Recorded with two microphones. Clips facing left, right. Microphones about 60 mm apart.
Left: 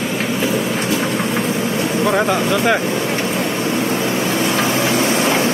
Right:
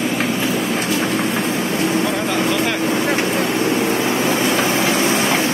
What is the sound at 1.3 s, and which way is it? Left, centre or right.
Vehicle, centre.